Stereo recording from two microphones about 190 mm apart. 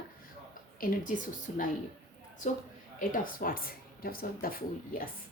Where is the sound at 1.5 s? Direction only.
40° left (ahead or behind).